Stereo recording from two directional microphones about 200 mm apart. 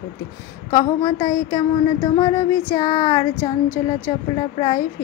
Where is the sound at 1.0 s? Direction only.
15° left (ahead or behind).